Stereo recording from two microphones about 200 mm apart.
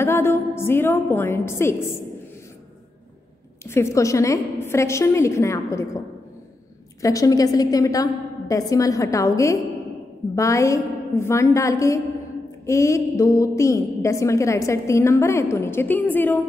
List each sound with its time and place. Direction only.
0.0 s a woman's voice: 10° left (ahead or behind)
3.6 s a woman's voice: 15° left (ahead or behind)
7.0 s a woman's voice: 15° left (ahead or behind)